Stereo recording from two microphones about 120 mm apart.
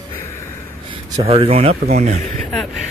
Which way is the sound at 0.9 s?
55° right (ahead or behind).